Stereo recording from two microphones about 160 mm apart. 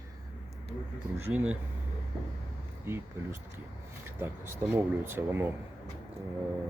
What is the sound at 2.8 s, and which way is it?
Speech, 15° right (ahead or behind).